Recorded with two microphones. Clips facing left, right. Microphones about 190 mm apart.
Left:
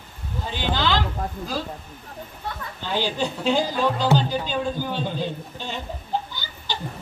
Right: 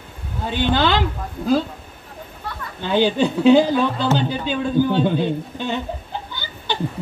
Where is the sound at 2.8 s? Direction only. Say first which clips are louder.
Right 8 dB; 55° right (ahead or behind).